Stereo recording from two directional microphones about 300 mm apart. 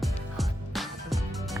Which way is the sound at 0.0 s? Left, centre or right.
Centre.